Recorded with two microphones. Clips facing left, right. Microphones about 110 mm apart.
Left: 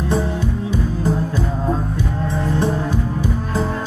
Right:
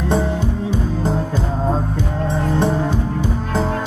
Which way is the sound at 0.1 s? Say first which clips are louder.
Right 2 dB; 25° right (ahead or behind).